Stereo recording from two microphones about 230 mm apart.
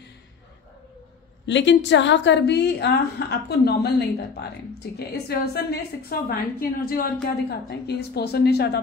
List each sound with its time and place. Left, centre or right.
1.4 s a woman's voice: left